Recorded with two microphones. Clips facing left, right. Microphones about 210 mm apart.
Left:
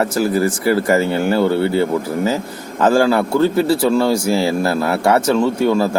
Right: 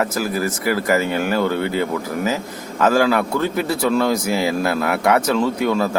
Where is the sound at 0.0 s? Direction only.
30° left (ahead or behind).